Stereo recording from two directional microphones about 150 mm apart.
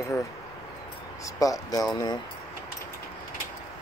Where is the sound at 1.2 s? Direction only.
25° left (ahead or behind).